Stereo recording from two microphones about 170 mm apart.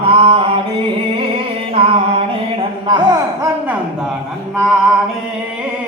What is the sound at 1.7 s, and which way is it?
Music, 35° right (ahead or behind).